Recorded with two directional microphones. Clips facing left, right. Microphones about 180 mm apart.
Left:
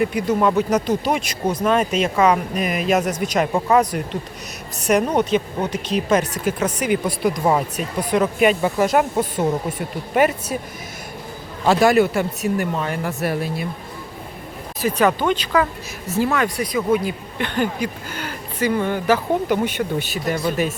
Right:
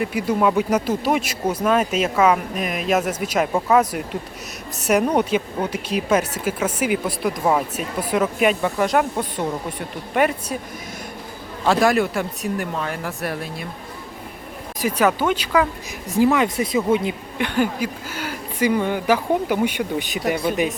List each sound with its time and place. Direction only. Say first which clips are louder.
0.0 s speech: left 1 dB; 5° right (ahead or behind)
11.6 s speech: left 3 dB; centre (ahead or behind)
14.8 s speech: left 1 dB; 10° right (ahead or behind)
17.3 s speech: right 1 dB; 10° right (ahead or behind)